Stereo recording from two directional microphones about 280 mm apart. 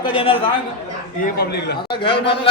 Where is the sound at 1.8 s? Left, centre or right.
Centre.